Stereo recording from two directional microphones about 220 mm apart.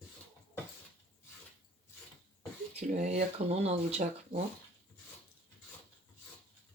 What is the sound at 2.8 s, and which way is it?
Speech, 30° right (ahead or behind).